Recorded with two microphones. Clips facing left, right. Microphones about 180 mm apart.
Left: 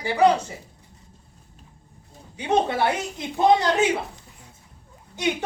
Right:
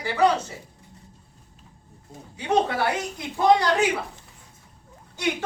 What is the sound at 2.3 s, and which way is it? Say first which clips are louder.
A woman's voice: left 1 dB; 20° left (ahead or behind).